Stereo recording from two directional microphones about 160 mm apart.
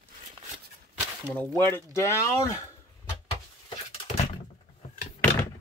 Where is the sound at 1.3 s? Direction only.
5° left (ahead or behind).